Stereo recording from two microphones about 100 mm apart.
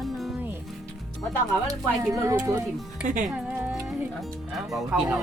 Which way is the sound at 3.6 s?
25° right (ahead or behind).